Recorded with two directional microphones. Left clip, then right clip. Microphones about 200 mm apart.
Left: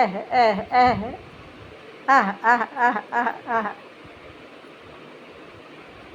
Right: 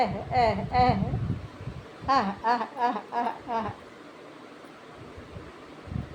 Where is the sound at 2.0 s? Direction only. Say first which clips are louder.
Left 7 dB; 15° left (ahead or behind).